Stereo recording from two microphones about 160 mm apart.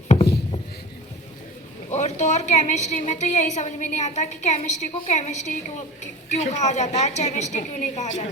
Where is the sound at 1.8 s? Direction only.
45° left (ahead or behind).